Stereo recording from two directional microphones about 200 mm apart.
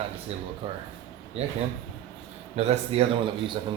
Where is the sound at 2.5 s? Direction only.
30° right (ahead or behind).